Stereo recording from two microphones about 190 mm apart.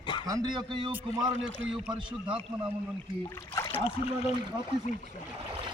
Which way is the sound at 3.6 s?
15° left (ahead or behind).